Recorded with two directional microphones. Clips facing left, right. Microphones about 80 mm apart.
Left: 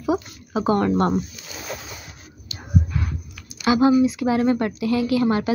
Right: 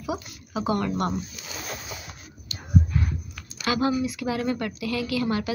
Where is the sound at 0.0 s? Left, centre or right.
Left.